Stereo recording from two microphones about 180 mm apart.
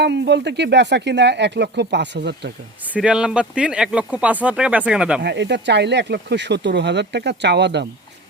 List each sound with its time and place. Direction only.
0.0 s speech: 75° right (ahead or behind)
2.9 s speech: 5° right (ahead or behind)
5.2 s speech: 70° right (ahead or behind)